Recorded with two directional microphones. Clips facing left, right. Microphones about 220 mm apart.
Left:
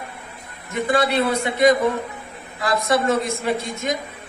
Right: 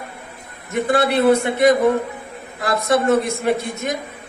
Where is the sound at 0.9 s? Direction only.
55° right (ahead or behind).